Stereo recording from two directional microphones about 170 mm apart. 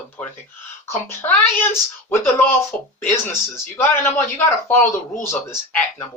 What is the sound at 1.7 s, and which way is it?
Speech, 15° left (ahead or behind).